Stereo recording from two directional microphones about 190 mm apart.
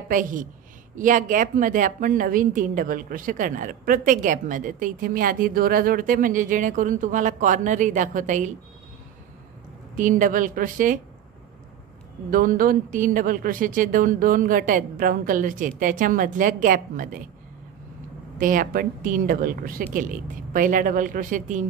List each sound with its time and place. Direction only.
0.1 s a woman's voice: 45° right (ahead or behind)
9.9 s a woman's voice: 45° right (ahead or behind)
12.3 s a woman's voice: 45° right (ahead or behind)
18.4 s a woman's voice: 45° right (ahead or behind)